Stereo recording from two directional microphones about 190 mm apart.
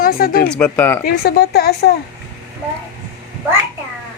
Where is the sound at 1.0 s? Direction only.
55° left (ahead or behind).